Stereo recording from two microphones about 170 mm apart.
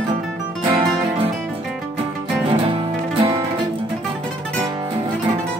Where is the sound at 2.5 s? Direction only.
35° right (ahead or behind).